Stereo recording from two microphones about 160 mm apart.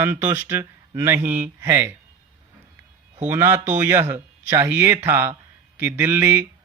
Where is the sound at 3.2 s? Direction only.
15° right (ahead or behind).